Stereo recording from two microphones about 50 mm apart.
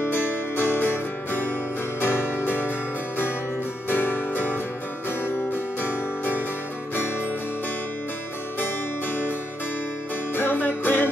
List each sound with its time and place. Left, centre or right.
0.0 s music: left
3.9 s music: left
10.3 s music: left